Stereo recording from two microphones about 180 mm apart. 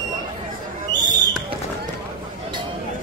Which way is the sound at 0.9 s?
20° right (ahead or behind).